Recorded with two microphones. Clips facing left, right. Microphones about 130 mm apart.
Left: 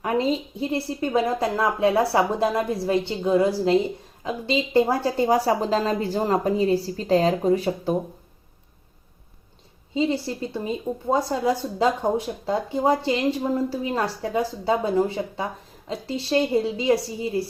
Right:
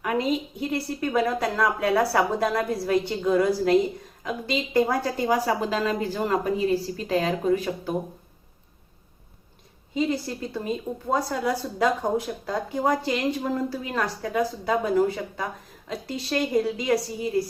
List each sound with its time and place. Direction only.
0.0 s speech: 30° left (ahead or behind)
9.9 s speech: 25° left (ahead or behind)